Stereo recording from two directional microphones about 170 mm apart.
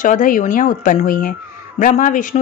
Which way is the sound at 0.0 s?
50° left (ahead or behind).